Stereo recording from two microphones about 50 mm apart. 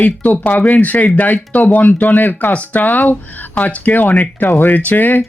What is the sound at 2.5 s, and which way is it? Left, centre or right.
Speech, left.